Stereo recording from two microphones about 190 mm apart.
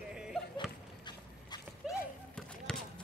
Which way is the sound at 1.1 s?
20° left (ahead or behind).